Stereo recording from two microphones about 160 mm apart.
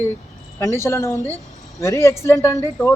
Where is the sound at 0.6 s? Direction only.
15° left (ahead or behind).